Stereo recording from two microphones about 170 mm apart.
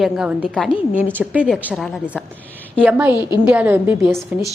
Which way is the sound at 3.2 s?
25° left (ahead or behind).